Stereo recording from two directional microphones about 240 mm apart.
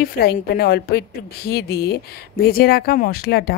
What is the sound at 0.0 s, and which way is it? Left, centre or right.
A woman's voice, left.